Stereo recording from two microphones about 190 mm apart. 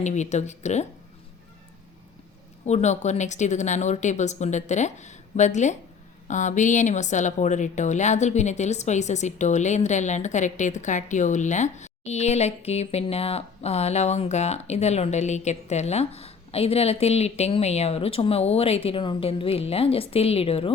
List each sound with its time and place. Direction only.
0.0 s a woman's voice: 40° left (ahead or behind)
2.6 s a woman's voice: 35° left (ahead or behind)